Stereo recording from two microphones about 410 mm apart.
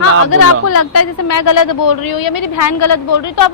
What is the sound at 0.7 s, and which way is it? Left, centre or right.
A woman's voice, left.